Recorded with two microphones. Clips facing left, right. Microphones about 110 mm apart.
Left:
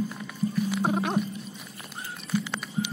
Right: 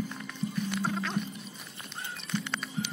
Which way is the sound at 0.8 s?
55° left (ahead or behind).